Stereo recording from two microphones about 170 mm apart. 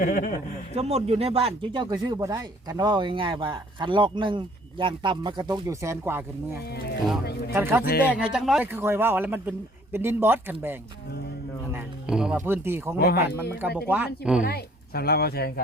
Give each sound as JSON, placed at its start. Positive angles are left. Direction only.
{"t": 0.0, "sound": "a man's voice", "side_deg": 50}
{"t": 0.7, "sound": "speech", "side_deg": -40}
{"t": 6.7, "sound": "speech", "side_deg": 70}
{"t": 7.5, "sound": "speech", "side_deg": -15}
{"t": 13.0, "sound": "speech", "side_deg": 70}
{"t": 13.8, "sound": "speech", "side_deg": -10}
{"t": 14.4, "sound": "speech", "side_deg": 70}